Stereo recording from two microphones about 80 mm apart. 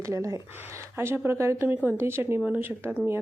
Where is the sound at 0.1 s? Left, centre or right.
Right.